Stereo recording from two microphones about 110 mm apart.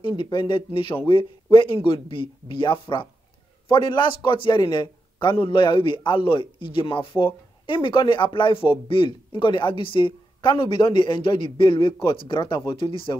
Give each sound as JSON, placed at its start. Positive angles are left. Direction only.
{"t": 0.2, "sound": "a man's voice", "side_deg": 45}